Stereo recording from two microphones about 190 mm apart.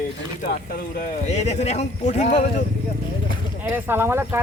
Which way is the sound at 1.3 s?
35° left (ahead or behind).